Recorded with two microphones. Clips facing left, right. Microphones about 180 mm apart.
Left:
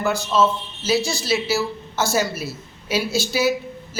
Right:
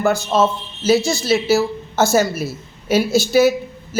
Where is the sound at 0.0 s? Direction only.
50° right (ahead or behind).